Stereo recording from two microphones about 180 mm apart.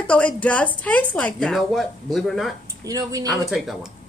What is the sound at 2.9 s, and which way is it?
Speech, 20° right (ahead or behind).